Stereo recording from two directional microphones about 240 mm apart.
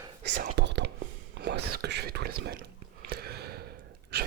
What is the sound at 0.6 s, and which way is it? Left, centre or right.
Whispering, right.